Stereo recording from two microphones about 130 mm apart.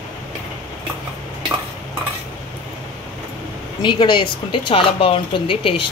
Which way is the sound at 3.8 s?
35° left (ahead or behind).